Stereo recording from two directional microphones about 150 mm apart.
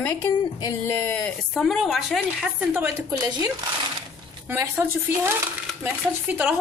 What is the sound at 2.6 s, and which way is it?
Speech, 10° right (ahead or behind).